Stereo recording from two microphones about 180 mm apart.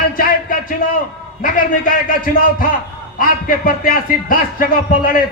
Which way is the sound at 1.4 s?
50° left (ahead or behind).